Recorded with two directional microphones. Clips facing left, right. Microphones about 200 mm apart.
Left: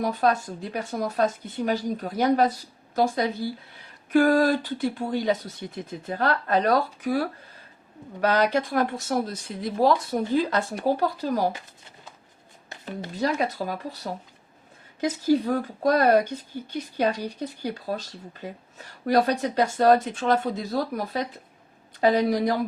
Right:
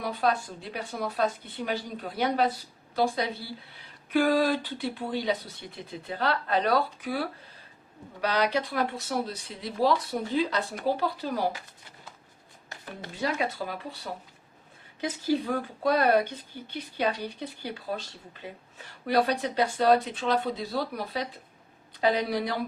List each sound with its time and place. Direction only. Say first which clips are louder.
0.0 s a woman's voice: left 4 dB; 45° left (ahead or behind)
13.1 s a woman's voice: left 4 dB; 40° left (ahead or behind)